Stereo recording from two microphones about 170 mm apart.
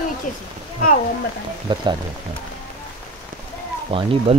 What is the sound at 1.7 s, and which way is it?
Speech, 25° right (ahead or behind).